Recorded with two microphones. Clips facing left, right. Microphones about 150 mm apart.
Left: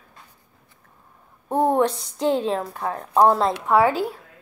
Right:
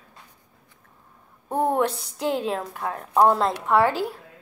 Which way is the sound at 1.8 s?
5° right (ahead or behind).